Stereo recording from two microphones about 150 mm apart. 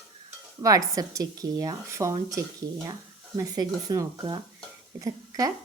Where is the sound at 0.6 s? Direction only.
25° right (ahead or behind).